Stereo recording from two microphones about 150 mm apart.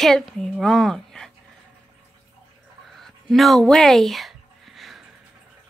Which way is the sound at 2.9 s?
Centre (ahead or behind).